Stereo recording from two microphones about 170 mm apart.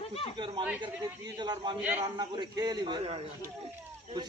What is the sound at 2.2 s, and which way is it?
Speech, 25° right (ahead or behind).